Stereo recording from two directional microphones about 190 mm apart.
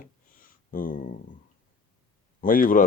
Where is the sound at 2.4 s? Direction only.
45° left (ahead or behind).